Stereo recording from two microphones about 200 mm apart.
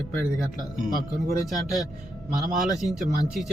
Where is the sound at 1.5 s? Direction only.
Centre (ahead or behind).